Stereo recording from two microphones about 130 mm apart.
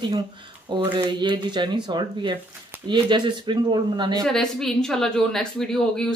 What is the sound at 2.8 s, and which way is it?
Speech, 35° right (ahead or behind).